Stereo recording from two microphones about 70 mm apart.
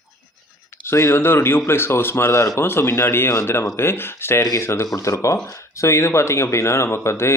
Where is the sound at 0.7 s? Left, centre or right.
Left.